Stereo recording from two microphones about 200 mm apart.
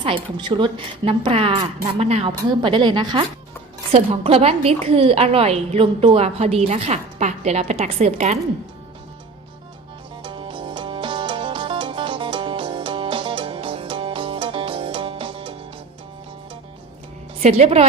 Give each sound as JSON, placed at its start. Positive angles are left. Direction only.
{"t": 0.0, "sound": "a woman's voice", "side_deg": -25}
{"t": 10.2, "sound": "music", "side_deg": -25}
{"t": 17.4, "sound": "a woman's voice", "side_deg": -30}